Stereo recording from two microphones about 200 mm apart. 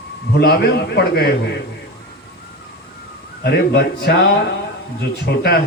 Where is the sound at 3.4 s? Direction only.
55° left (ahead or behind).